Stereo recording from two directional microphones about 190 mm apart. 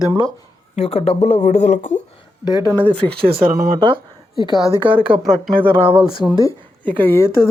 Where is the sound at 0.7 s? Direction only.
30° left (ahead or behind).